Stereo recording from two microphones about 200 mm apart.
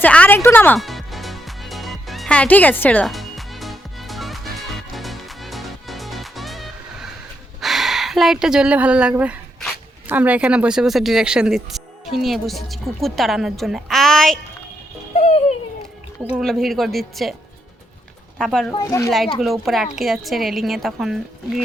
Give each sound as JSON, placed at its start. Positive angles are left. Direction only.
{"t": 0.0, "sound": "music", "side_deg": 10}
{"t": 7.6, "sound": "speech", "side_deg": 0}
{"t": 15.1, "sound": "music", "side_deg": 35}
{"t": 16.3, "sound": "a woman's voice", "side_deg": 0}
{"t": 18.3, "sound": "a woman's voice", "side_deg": 0}
{"t": 18.7, "sound": "speech", "side_deg": 15}
{"t": 19.1, "sound": "a woman's voice", "side_deg": 0}